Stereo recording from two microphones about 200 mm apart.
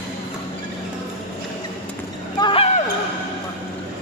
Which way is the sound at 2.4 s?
25° left (ahead or behind).